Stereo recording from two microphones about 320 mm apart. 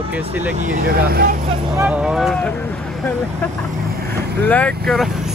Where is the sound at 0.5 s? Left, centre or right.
Right.